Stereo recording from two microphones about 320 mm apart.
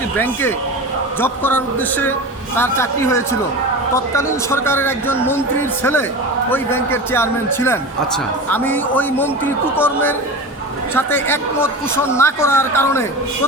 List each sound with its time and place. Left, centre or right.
1.2 s a man's voice: centre